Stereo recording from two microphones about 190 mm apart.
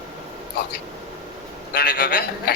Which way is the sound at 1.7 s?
60° left (ahead or behind).